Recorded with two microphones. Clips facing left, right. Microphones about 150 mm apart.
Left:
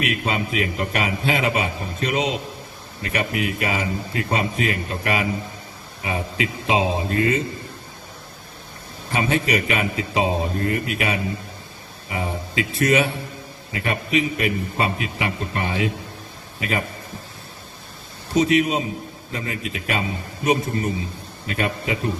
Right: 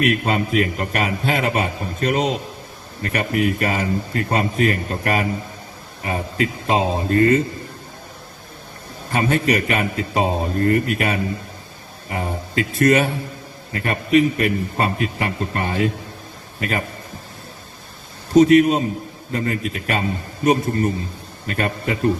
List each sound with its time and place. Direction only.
0.0 s speech: 45° right (ahead or behind)
9.1 s a man's voice: 45° right (ahead or behind)
18.3 s speech: 45° right (ahead or behind)